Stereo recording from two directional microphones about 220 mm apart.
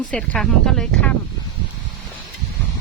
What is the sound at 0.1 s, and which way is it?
Speech, 5° left (ahead or behind).